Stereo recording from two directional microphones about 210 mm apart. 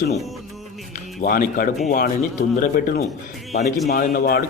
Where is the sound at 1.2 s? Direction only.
45° left (ahead or behind).